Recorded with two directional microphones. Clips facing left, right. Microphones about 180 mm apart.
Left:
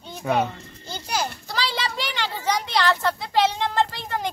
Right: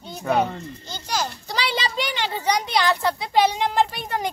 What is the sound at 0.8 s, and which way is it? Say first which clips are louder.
Children playing: left 1 dB; 10° left (ahead or behind).